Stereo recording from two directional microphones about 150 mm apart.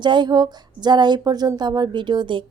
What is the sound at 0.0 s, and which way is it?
Speech, 30° right (ahead or behind).